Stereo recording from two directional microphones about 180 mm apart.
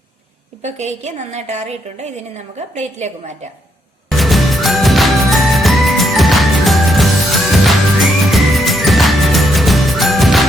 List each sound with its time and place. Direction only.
0.6 s a woman's voice: 40° right (ahead or behind)
4.2 s music: centre (ahead or behind)